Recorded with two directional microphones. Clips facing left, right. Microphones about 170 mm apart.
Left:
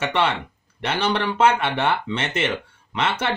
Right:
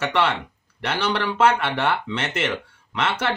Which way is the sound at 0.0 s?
20° left (ahead or behind).